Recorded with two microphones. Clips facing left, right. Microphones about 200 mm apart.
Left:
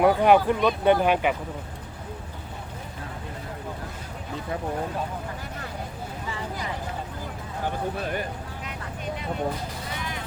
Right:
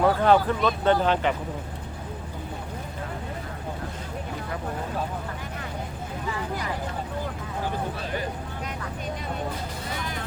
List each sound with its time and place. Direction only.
0.0 s speech: 15° left (ahead or behind)